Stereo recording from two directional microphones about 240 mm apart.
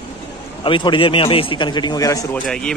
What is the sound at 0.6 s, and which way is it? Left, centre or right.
A man's voice, centre.